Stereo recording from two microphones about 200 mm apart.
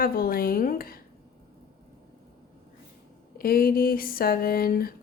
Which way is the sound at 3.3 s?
45° left (ahead or behind).